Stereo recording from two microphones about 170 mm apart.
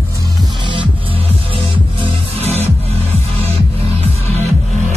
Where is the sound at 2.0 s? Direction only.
40° right (ahead or behind).